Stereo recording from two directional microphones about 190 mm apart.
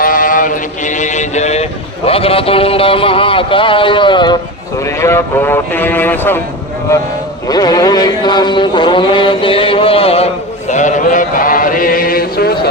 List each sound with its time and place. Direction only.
0.0 s mantra: 45° left (ahead or behind)
2.0 s a man's voice: 30° left (ahead or behind)
4.9 s speech: 15° left (ahead or behind)
7.4 s music: 20° left (ahead or behind)
10.7 s chant: 40° left (ahead or behind)